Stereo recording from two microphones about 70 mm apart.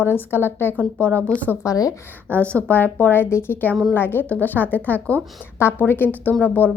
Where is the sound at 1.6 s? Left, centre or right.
Left.